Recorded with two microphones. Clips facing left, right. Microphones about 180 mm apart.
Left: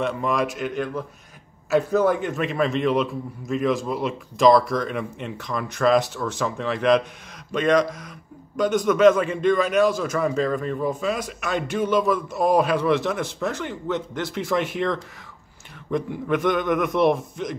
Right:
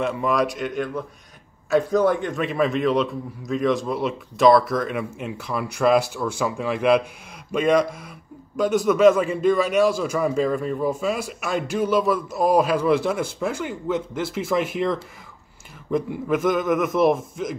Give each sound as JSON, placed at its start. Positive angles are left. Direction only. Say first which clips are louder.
{"t": 0.0, "sound": "a man's voice", "louder": "right 2 dB", "side_deg": -5}